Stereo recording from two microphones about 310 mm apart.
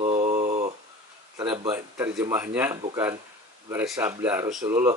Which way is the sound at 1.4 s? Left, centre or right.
Centre.